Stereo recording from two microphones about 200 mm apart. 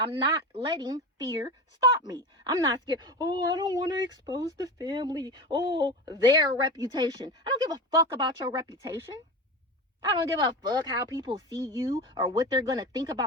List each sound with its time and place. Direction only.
0.0 s a woman's voice: 25° right (ahead or behind)